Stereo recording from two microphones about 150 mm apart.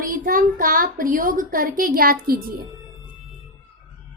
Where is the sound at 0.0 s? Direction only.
65° right (ahead or behind).